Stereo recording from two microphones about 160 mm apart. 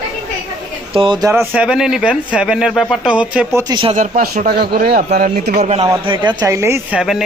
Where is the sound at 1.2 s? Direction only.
15° right (ahead or behind).